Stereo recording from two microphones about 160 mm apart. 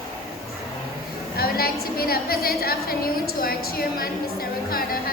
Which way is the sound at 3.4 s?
65° left (ahead or behind).